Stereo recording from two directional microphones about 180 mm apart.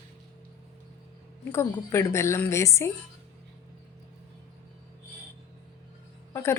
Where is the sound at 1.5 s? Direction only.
15° left (ahead or behind).